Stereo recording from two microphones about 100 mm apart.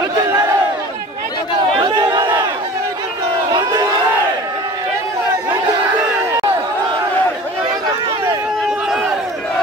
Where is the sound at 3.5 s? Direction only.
40° right (ahead or behind).